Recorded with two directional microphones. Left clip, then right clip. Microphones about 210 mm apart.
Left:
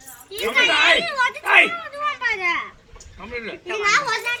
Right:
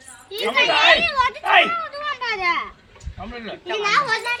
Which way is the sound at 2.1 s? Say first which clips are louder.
Left 1 dB; 5° right (ahead or behind).